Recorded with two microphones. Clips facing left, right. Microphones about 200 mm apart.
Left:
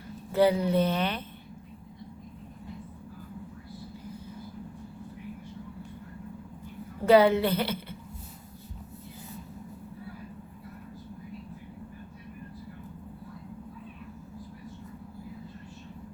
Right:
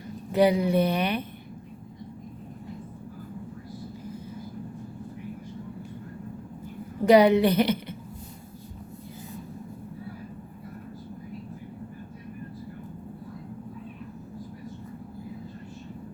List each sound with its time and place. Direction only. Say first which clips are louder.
0.3 s speech: right 2 dB; 15° right (ahead or behind)
7.0 s a woman's voice: right 3 dB; 15° right (ahead or behind)